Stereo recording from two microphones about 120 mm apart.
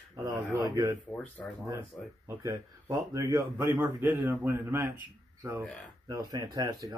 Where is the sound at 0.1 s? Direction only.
30° right (ahead or behind).